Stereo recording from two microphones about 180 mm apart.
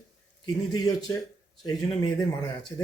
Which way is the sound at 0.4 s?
20° left (ahead or behind).